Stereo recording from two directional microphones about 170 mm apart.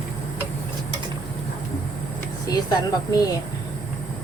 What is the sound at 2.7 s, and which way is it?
Speech, 20° left (ahead or behind).